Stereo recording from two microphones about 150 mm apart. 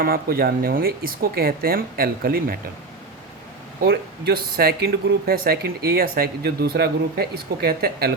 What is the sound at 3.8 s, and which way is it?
Speech, 85° right.